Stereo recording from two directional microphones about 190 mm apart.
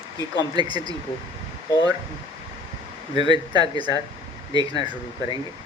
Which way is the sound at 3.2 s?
25° right (ahead or behind).